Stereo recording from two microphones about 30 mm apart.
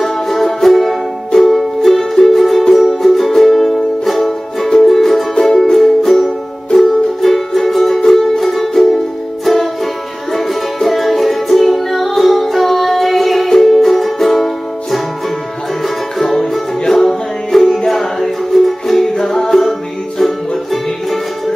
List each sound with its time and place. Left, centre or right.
0.0 s music: centre